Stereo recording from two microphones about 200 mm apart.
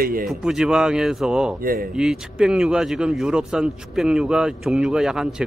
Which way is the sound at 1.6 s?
45° right (ahead or behind).